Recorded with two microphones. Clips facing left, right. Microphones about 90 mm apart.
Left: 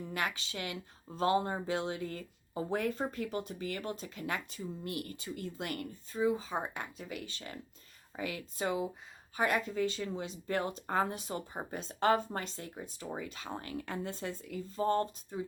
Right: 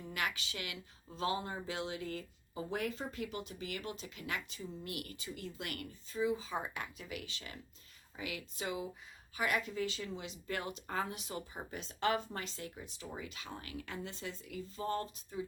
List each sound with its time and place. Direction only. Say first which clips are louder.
0.1 s speech: left 1 dB; 30° left (ahead or behind)
6.1 s speech: left 3 dB; 45° left (ahead or behind)